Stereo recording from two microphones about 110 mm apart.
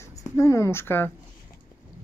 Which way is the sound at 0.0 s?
30° left (ahead or behind).